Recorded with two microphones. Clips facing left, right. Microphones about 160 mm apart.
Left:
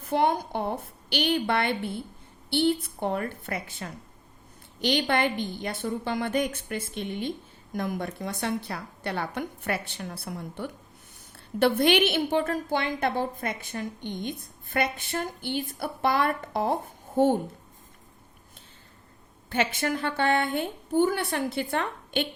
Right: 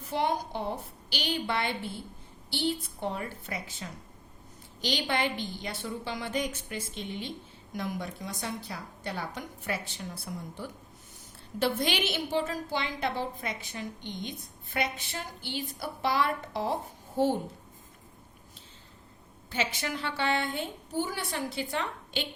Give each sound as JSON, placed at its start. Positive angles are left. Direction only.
{"t": 0.0, "sound": "a woman's voice", "side_deg": 55}
{"t": 19.5, "sound": "a woman's voice", "side_deg": 55}